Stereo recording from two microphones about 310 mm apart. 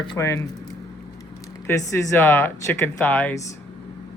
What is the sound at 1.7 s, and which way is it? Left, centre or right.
Speech, centre.